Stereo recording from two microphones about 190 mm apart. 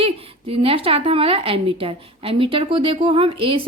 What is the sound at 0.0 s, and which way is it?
A woman's voice, 30° right (ahead or behind).